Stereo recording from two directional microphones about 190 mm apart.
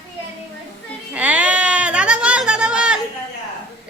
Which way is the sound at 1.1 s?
5° right (ahead or behind).